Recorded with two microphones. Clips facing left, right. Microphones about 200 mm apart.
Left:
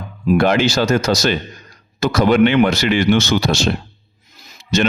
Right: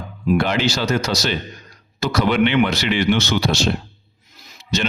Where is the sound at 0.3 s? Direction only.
45° left (ahead or behind).